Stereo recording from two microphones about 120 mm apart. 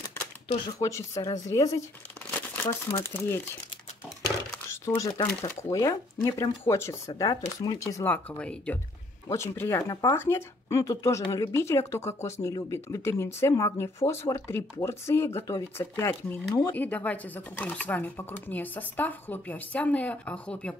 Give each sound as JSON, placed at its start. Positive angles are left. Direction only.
{"t": 0.7, "sound": "speech", "side_deg": 25}
{"t": 2.3, "sound": "crumpling", "side_deg": 15}
{"t": 2.9, "sound": "speech", "side_deg": 20}
{"t": 4.6, "sound": "speech", "side_deg": 25}
{"t": 8.0, "sound": "speech", "side_deg": 15}
{"t": 9.3, "sound": "speech", "side_deg": 20}
{"t": 11.5, "sound": "speech", "side_deg": 20}
{"t": 16.7, "sound": "speech", "side_deg": 15}